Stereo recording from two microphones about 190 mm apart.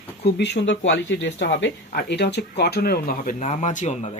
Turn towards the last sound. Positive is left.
turn(degrees=35)  # may be behind; listen again after turning